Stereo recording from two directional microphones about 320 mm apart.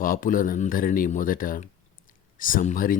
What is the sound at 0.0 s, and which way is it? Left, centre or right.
Speech, left.